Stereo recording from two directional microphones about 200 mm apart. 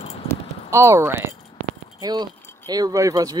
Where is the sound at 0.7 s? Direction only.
15° right (ahead or behind).